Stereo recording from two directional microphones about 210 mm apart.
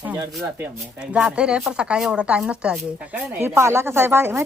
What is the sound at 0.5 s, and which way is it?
Speech, 5° right (ahead or behind).